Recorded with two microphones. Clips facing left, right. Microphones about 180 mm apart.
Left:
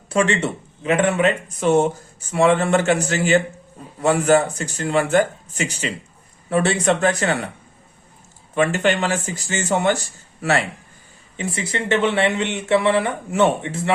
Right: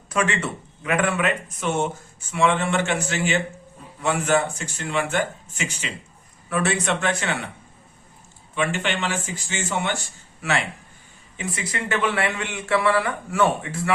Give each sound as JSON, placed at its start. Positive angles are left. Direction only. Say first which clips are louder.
{"t": 0.1, "sound": "speech", "louder": "left 5 dB", "side_deg": 30}
{"t": 8.5, "sound": "speech", "louder": "left 6 dB", "side_deg": 40}
{"t": 11.3, "sound": "speech", "louder": "left 4 dB", "side_deg": 30}